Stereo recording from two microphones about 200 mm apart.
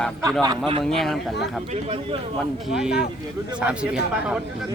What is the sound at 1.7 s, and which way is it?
Speech, 30° right (ahead or behind).